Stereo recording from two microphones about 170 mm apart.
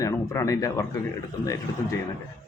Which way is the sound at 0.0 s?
20° left (ahead or behind).